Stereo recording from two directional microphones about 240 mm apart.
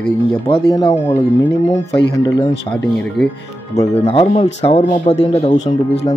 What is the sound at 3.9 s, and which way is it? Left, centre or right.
Speech, left.